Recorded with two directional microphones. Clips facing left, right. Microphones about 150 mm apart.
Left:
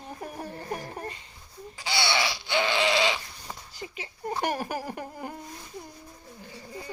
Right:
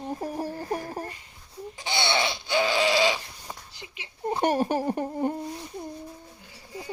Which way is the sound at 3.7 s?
45° left (ahead or behind).